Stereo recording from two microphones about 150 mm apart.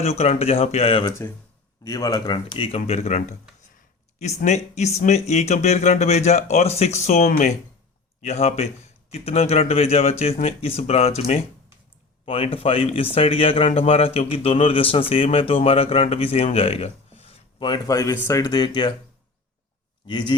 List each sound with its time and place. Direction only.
0.0 s speech: 45° left (ahead or behind)
1.8 s speech: 25° left (ahead or behind)
2.7 s speech: 45° left (ahead or behind)
12.2 s speech: 40° left (ahead or behind)
20.1 s speech: 30° left (ahead or behind)